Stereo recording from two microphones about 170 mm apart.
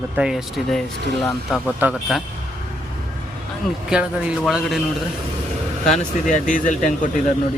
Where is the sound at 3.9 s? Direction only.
5° right (ahead or behind).